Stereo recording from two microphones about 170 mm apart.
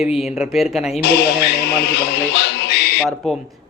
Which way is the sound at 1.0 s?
75° left (ahead or behind).